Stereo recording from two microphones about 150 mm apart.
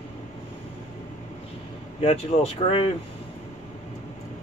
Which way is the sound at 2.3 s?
50° left (ahead or behind).